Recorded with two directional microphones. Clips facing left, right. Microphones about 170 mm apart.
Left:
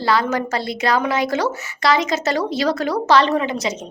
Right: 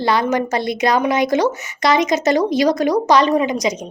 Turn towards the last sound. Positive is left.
turn(degrees=-15)  # may be behind; listen again after turning